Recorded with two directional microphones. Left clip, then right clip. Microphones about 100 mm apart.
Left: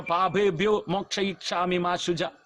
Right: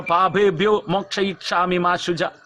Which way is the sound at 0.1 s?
25° left (ahead or behind).